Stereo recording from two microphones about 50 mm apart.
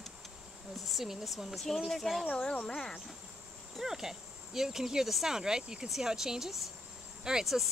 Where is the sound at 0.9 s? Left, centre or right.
Centre.